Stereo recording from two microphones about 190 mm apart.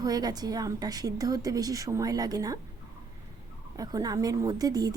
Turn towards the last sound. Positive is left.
turn(degrees=-20)  # may be behind; listen again after turning